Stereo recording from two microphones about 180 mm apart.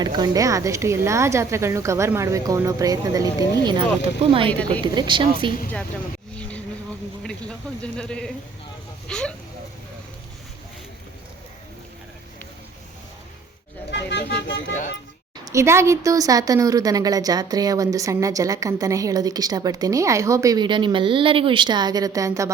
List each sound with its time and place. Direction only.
0.0 s a woman's voice: 25° right (ahead or behind)
4.4 s speech: 5° left (ahead or behind)
4.8 s a woman's voice: 25° right (ahead or behind)
7.2 s speech: 5° left (ahead or behind)
13.9 s speech: 75° left (ahead or behind)
15.4 s a woman's voice: 15° right (ahead or behind)